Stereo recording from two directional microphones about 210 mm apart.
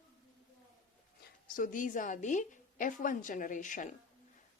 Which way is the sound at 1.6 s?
40° left (ahead or behind).